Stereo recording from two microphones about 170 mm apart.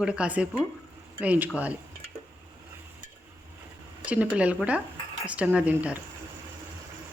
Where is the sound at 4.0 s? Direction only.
10° right (ahead or behind).